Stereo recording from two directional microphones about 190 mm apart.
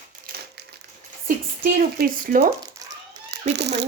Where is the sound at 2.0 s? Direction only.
50° right (ahead or behind).